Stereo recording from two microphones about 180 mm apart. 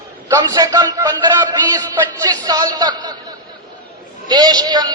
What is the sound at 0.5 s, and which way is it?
Speech, 20° right (ahead or behind).